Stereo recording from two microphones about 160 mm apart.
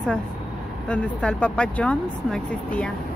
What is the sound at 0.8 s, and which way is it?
Speech, 5° left (ahead or behind).